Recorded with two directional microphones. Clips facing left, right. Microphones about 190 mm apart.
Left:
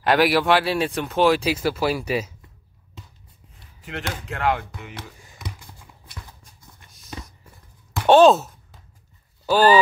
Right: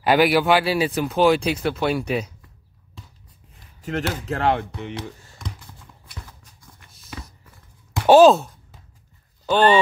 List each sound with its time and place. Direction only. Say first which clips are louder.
0.0 s speech: right 1 dB; centre (ahead or behind)
3.8 s speech: right 6 dB; 40° right (ahead or behind)
5.2 s computer keyboard: right 1 dB; 15° left (ahead or behind)
8.1 s speech: right 2 dB; centre (ahead or behind)
9.5 s speech: left 1 dB; 5° left (ahead or behind)